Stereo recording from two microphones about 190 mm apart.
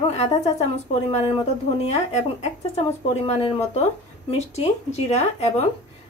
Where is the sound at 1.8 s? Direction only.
35° left (ahead or behind).